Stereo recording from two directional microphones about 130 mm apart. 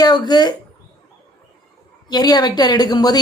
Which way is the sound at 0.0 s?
30° left (ahead or behind).